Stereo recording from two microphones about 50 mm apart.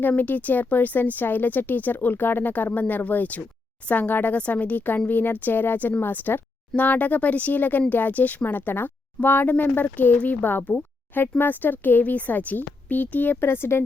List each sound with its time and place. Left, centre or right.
0.2 s speech: left